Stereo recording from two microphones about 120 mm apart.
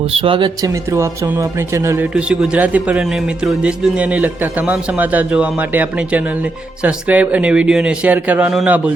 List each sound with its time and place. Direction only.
0.0 s speech: 50° right (ahead or behind)
0.6 s speech: 25° right (ahead or behind)
2.1 s speech: 10° right (ahead or behind)